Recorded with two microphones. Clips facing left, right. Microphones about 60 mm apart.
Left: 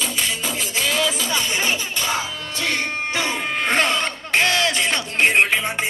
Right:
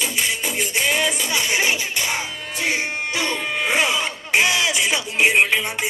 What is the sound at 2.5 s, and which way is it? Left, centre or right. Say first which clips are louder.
Music: right 1 dB; left.